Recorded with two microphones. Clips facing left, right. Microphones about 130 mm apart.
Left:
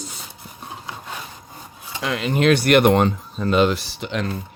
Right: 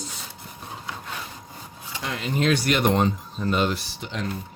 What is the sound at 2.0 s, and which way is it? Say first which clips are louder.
Speech: left 5 dB; 90° left.